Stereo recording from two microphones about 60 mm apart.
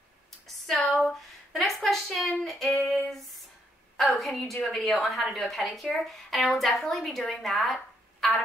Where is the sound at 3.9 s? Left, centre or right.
Centre.